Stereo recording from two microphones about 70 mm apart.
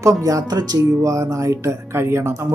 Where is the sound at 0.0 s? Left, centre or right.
Right.